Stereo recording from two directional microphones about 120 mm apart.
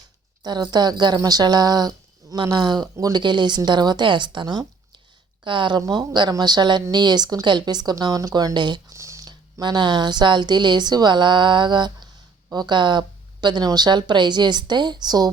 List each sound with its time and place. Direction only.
0.4 s speech: 35° right (ahead or behind)
5.8 s speech: 30° right (ahead or behind)
8.9 s speech: 25° right (ahead or behind)